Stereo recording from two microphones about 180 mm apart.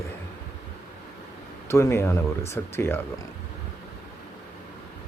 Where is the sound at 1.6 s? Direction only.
15° left (ahead or behind).